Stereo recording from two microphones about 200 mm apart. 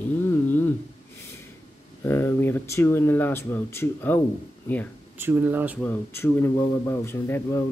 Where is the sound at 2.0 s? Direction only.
10° left (ahead or behind).